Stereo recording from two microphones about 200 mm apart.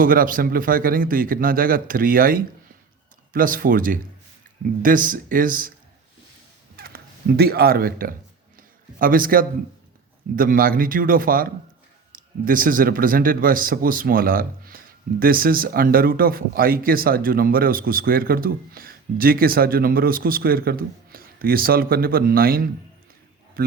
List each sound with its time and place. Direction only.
0.0 s speech: 45° right (ahead or behind)
6.7 s speech: 50° right (ahead or behind)
8.5 s a sound: 45° right (ahead or behind)
10.3 s speech: 45° right (ahead or behind)